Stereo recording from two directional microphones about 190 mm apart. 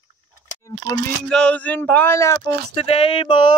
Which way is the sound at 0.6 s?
15° left (ahead or behind).